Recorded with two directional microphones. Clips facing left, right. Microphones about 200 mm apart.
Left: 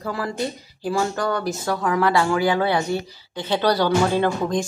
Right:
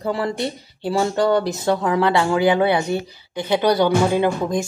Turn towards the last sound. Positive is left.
turn(degrees=-10)  # may be behind; listen again after turning